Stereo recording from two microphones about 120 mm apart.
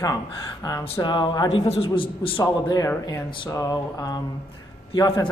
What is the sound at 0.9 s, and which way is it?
A man's voice, 40° left (ahead or behind).